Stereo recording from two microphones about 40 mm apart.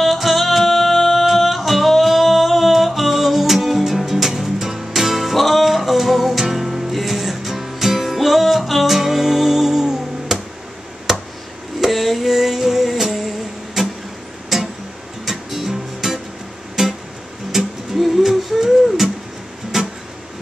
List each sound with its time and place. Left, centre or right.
0.0 s music: centre
11.1 s a sound: centre
11.8 s music: centre
13.8 s vehicle: centre
14.5 s music: centre